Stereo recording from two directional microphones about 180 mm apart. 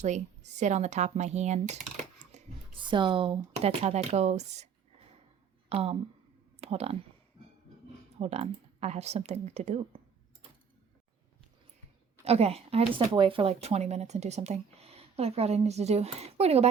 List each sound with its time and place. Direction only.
0.0 s speech: 40° right (ahead or behind)
2.7 s speech: 25° right (ahead or behind)
8.2 s speech: 35° right (ahead or behind)
12.2 s speech: 35° right (ahead or behind)